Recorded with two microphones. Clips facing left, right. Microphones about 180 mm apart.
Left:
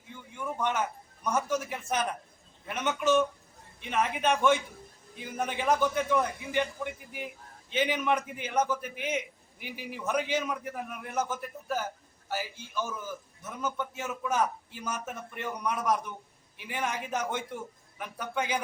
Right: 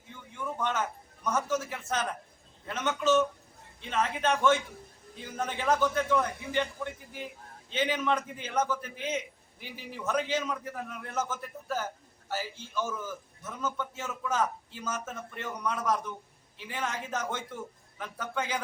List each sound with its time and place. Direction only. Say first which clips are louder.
0.3 s a man's voice: left 1 dB; 15° left (ahead or behind)
7.7 s a man's voice: left 1 dB; 15° left (ahead or behind)